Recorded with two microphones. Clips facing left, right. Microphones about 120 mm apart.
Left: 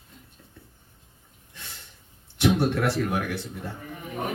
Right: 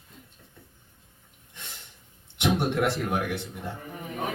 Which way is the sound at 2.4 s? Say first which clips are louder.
Left 2 dB; 20° right (ahead or behind).